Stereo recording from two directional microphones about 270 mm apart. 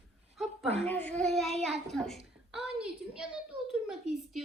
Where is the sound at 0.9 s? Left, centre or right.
Centre.